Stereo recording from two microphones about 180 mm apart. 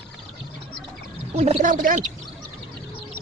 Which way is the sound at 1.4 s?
35° right (ahead or behind).